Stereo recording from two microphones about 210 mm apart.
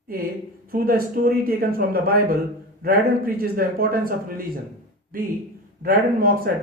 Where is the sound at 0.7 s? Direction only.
45° right (ahead or behind).